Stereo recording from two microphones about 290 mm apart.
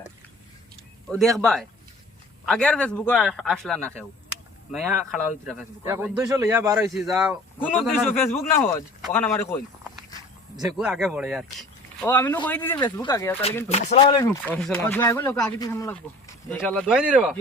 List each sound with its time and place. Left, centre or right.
1.4 s a man's voice: centre
10.8 s a man's voice: centre
13.7 s speech: left; by 17.4 s centre